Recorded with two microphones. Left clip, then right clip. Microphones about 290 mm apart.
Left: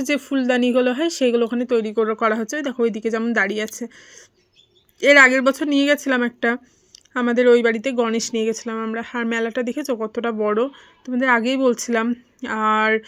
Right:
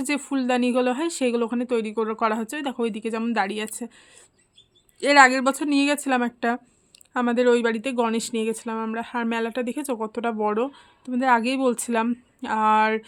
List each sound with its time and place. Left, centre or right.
0.0 s speech: centre